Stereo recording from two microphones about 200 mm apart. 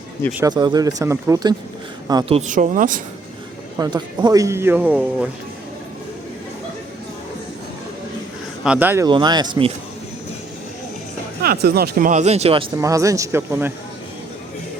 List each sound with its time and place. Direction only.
0.4 s speech: 20° right (ahead or behind)
2.5 s speech: 40° right (ahead or behind)
3.8 s speech: 20° right (ahead or behind)
8.6 s speech: 5° right (ahead or behind)
9.0 s speech: 20° right (ahead or behind)
11.4 s speech: 50° right (ahead or behind); by 12.6 s 30° right (ahead or behind)
12.7 s speech: 15° right (ahead or behind)